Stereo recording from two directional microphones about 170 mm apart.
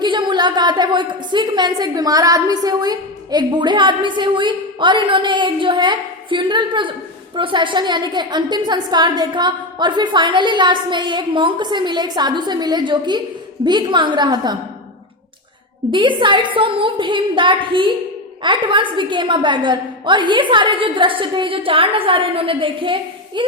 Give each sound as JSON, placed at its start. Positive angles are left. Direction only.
{"t": 0.0, "sound": "a woman's voice", "side_deg": -30}
{"t": 15.9, "sound": "a woman's voice", "side_deg": -30}